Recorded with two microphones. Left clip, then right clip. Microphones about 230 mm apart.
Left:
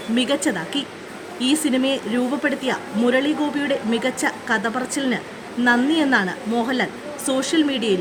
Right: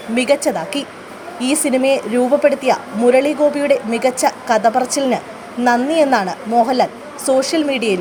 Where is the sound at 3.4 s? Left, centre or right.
Centre.